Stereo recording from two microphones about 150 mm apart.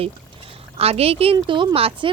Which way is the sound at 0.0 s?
40° right (ahead or behind).